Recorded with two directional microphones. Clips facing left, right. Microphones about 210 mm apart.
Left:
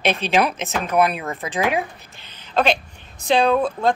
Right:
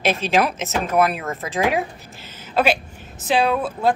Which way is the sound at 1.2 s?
15° left (ahead or behind).